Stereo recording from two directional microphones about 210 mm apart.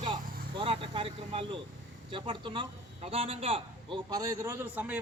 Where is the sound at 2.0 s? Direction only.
25° right (ahead or behind).